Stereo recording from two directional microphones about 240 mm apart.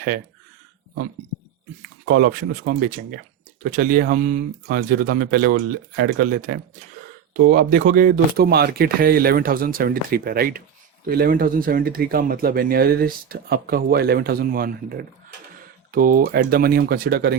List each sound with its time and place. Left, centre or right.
2.0 s speech: right